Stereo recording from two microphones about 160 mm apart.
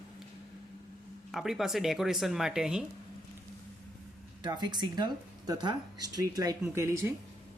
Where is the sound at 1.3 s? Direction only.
Centre (ahead or behind).